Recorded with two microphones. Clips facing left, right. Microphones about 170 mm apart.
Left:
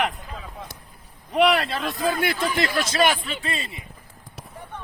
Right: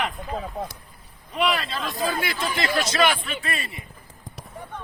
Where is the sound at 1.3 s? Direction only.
70° left (ahead or behind).